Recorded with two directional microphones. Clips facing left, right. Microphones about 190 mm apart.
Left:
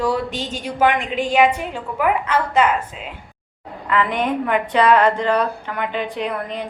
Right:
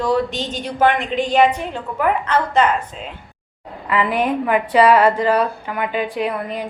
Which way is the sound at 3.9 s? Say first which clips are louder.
Right 1 dB; 10° right (ahead or behind).